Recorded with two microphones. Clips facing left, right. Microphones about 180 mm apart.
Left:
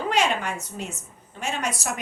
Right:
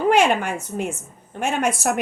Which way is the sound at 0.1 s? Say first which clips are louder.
Right 6 dB; 55° right (ahead or behind).